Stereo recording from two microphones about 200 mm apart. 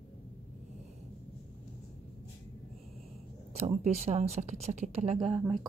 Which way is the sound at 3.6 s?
35° right (ahead or behind).